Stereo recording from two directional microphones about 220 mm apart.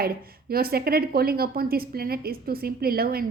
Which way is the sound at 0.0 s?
45° right (ahead or behind).